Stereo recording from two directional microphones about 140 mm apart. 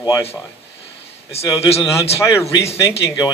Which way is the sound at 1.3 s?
45° left (ahead or behind).